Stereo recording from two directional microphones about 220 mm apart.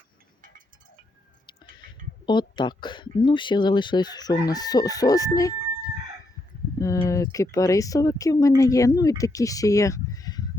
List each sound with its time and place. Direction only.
2.2 s speech: 20° left (ahead or behind)
6.7 s speech: 15° left (ahead or behind)